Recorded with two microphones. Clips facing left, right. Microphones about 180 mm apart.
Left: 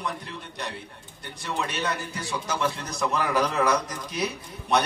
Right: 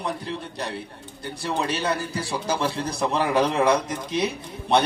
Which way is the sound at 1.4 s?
35° right (ahead or behind).